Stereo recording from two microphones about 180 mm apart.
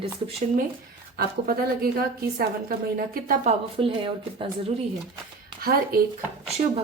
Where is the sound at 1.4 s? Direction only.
55° right (ahead or behind).